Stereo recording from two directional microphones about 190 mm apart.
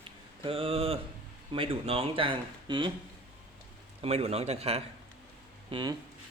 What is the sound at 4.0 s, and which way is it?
Speech, 35° right (ahead or behind).